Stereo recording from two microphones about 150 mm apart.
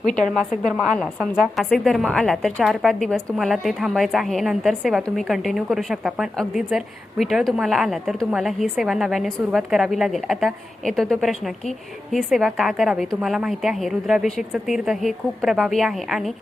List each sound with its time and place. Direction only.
0.0 s a woman's voice: 55° left (ahead or behind)
1.2 s a woman's voice: 5° right (ahead or behind)